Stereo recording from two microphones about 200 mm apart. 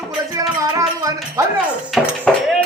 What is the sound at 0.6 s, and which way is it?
Music, 15° right (ahead or behind).